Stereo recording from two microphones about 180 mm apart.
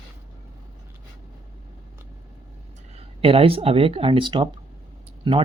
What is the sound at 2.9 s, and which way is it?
Speech, 30° right (ahead or behind).